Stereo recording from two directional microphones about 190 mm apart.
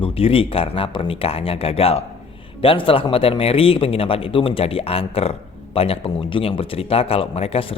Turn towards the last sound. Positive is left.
turn(degrees=30)  # may be behind; listen again after turning